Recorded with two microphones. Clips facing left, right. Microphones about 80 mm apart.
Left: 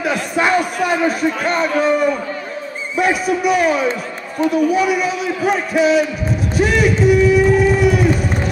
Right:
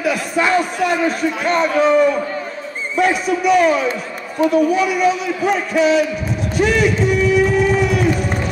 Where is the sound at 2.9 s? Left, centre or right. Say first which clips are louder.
Even; centre.